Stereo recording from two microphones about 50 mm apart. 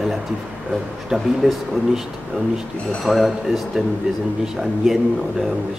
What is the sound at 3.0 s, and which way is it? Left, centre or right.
A man's voice, centre.